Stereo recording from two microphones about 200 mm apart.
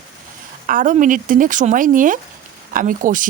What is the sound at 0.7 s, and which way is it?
Speech, 40° right (ahead or behind).